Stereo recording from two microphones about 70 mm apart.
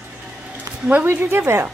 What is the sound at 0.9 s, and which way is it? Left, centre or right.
Speech, right.